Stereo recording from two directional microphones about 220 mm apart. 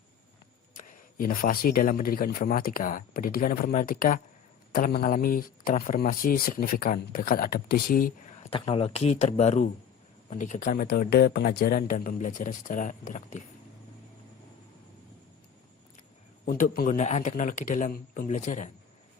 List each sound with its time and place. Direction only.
0.7 s speech: 35° left (ahead or behind)
8.4 s speech: 25° left (ahead or behind)
16.5 s speech: 40° left (ahead or behind)